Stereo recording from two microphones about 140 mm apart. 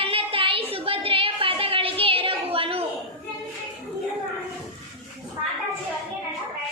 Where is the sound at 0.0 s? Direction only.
40° right (ahead or behind).